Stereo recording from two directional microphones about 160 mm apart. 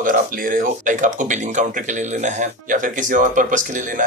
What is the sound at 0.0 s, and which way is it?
Speech, 60° right (ahead or behind).